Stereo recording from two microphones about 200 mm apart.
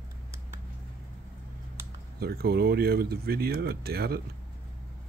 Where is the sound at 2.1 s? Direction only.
50° right (ahead or behind).